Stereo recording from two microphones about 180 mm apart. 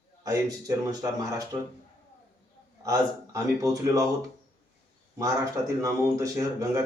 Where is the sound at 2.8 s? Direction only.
20° right (ahead or behind).